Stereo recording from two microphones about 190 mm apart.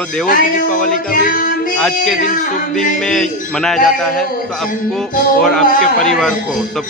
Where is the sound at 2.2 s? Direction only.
45° left (ahead or behind).